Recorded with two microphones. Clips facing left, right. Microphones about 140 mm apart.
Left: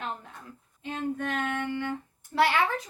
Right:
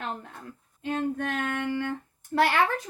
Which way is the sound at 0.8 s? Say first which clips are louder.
Right 3 dB; 50° right (ahead or behind).